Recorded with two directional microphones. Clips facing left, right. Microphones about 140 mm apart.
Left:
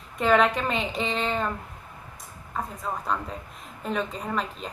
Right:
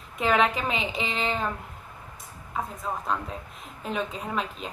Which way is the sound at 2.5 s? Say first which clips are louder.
Even; centre (ahead or behind).